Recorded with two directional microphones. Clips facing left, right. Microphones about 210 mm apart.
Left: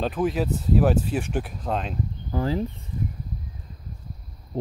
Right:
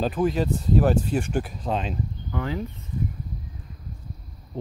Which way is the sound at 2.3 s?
35° left (ahead or behind).